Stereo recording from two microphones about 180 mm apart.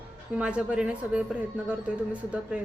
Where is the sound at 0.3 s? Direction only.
5° right (ahead or behind).